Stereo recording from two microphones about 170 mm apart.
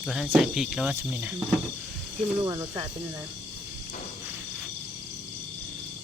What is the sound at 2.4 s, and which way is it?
Speech, 20° right (ahead or behind).